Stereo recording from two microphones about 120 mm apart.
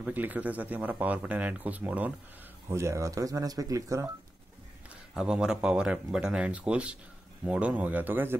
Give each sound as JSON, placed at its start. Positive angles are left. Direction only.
{"t": 0.0, "sound": "speech", "side_deg": -15}
{"t": 2.7, "sound": "speech", "side_deg": -25}
{"t": 5.1, "sound": "speech", "side_deg": -5}